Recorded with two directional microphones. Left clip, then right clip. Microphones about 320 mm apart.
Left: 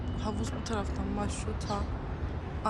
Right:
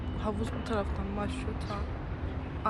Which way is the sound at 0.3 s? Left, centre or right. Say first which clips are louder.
Right 2 dB; centre.